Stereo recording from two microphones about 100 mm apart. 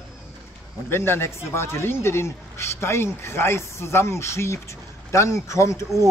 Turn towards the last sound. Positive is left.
turn(degrees=30)  # may be behind; listen again after turning